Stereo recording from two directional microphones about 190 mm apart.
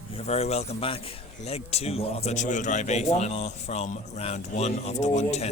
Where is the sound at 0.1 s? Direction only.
35° left (ahead or behind).